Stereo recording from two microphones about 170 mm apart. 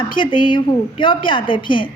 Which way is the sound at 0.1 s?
30° left (ahead or behind).